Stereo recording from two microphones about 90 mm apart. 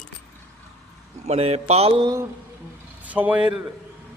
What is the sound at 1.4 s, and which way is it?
Speech, 90° right.